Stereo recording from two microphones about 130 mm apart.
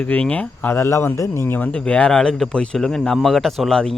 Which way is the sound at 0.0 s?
10° left (ahead or behind).